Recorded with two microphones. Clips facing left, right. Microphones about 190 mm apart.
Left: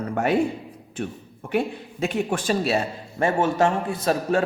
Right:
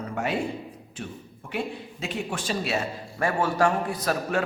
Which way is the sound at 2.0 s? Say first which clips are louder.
Left 8 dB; 50° left (ahead or behind).